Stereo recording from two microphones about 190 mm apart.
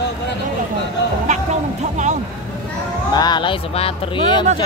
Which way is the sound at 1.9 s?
40° right (ahead or behind).